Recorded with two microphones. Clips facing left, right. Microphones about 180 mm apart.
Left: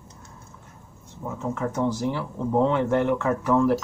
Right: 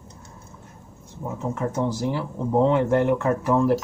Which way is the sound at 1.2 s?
15° right (ahead or behind).